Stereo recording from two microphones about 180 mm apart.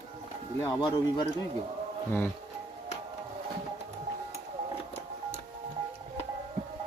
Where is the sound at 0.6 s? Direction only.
20° left (ahead or behind).